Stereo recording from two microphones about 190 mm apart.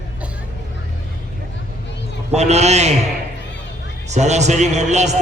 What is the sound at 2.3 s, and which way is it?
Speech, 35° right (ahead or behind).